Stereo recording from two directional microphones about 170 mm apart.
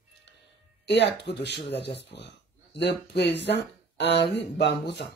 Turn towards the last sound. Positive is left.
turn(degrees=90)